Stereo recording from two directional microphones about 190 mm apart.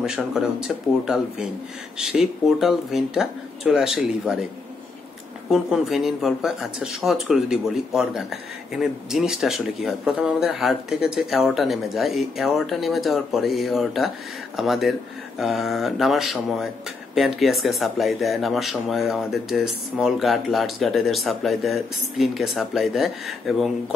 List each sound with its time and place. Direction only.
0.0 s speech: 5° right (ahead or behind)
5.5 s speech: centre (ahead or behind)